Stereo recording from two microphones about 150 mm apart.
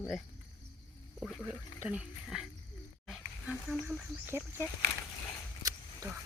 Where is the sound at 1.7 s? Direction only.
10° right (ahead or behind).